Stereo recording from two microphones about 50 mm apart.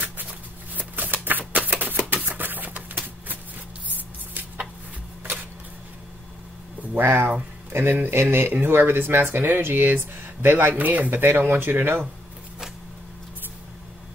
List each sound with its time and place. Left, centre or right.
0.0 s shuffling cards: right
1.5 s a sound: right
2.2 s typewriter: right
6.9 s speech: right
10.8 s speech: right